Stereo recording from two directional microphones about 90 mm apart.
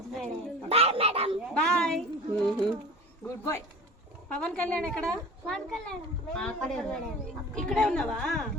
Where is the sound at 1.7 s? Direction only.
10° left (ahead or behind).